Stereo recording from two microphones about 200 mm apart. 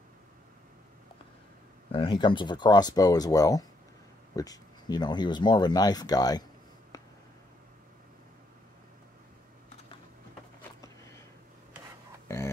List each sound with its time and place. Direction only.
1.9 s speech: 25° left (ahead or behind)